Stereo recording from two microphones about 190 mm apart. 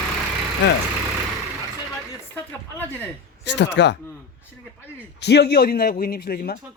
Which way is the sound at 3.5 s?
65° left (ahead or behind).